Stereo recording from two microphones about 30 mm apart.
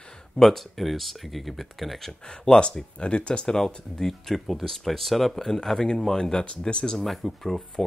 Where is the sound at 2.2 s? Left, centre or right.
Centre.